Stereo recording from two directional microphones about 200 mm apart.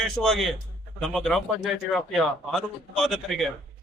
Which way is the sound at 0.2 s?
Centre (ahead or behind).